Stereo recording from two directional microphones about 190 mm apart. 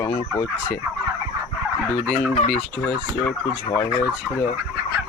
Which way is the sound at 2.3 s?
35° left (ahead or behind).